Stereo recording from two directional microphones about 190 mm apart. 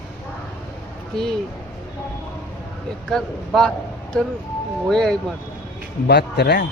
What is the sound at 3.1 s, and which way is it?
Speech, 5° left (ahead or behind).